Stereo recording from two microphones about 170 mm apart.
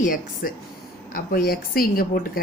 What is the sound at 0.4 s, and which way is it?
Speech, 55° left (ahead or behind).